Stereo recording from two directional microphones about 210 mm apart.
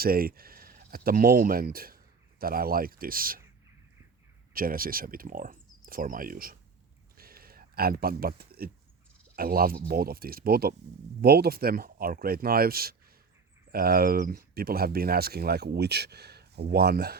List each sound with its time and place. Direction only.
0.0 s speech: 45° right (ahead or behind)
4.5 s speech: 45° right (ahead or behind)
7.2 s a sound: 45° right (ahead or behind)
9.3 s speech: 45° right (ahead or behind)